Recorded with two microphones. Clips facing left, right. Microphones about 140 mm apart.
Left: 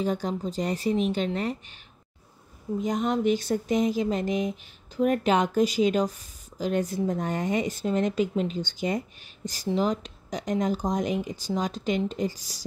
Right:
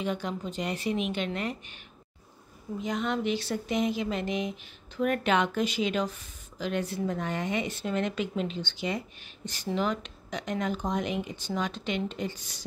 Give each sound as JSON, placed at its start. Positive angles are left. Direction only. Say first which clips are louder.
{"t": 0.0, "sound": "speech", "louder": "left 4 dB", "side_deg": 40}
{"t": 2.8, "sound": "speech", "louder": "left 4 dB", "side_deg": 45}